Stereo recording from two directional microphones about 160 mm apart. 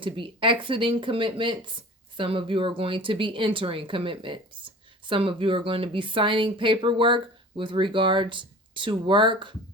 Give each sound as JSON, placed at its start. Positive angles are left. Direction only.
{"t": 0.0, "sound": "speech", "side_deg": -30}